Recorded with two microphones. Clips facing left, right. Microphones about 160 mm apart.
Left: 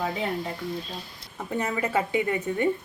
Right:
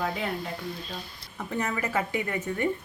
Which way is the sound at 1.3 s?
20° left (ahead or behind).